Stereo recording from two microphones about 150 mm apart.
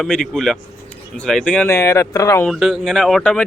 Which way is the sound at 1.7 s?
20° left (ahead or behind).